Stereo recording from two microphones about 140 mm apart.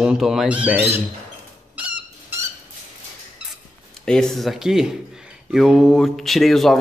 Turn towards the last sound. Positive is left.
turn(degrees=0)  # may be behind; listen again after turning